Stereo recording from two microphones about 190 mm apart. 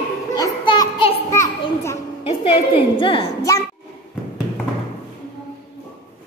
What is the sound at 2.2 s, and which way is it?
A woman's voice, 30° left (ahead or behind).